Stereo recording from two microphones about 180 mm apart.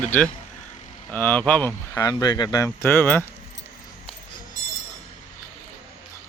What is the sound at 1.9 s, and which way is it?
Speech, 20° left (ahead or behind).